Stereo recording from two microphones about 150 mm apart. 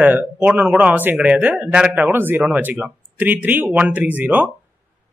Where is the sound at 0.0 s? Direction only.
10° right (ahead or behind).